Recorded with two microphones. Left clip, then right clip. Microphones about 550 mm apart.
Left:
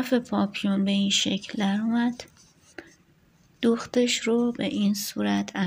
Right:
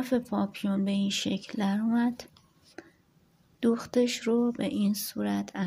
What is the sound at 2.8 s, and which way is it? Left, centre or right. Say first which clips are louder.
Chopping: left 5 dB; right.